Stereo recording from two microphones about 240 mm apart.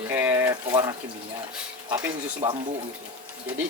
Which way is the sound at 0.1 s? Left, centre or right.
Centre.